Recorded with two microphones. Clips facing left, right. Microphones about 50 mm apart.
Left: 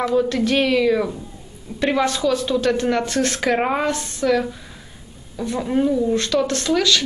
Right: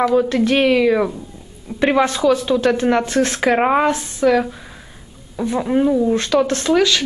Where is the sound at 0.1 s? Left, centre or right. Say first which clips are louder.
Right 3 dB; centre.